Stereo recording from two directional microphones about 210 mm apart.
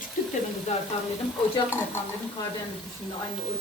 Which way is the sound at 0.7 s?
35° left (ahead or behind).